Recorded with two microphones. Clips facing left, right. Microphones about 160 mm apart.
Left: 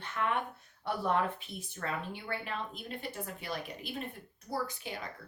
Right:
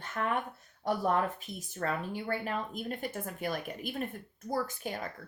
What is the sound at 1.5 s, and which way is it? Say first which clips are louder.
Speech: right 7 dB; 40° right (ahead or behind).